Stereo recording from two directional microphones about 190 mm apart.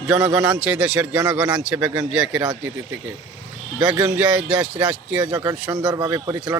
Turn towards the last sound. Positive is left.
turn(degrees=-15)  # may be behind; listen again after turning